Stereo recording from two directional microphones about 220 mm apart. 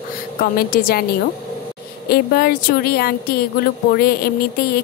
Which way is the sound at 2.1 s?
45° left (ahead or behind).